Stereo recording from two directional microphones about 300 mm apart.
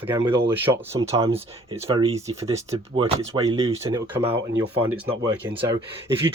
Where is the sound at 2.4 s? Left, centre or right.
Centre.